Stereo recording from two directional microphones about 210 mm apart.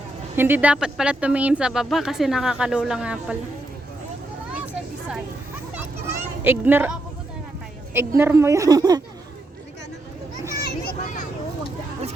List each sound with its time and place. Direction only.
0.3 s speech: 10° right (ahead or behind)
5.7 s children playing: 10° right (ahead or behind)
7.9 s a woman's voice: 10° right (ahead or behind)
10.8 s vehicle: 40° left (ahead or behind)